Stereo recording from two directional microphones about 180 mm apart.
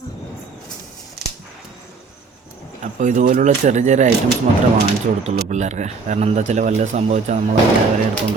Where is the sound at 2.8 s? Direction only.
45° right (ahead or behind).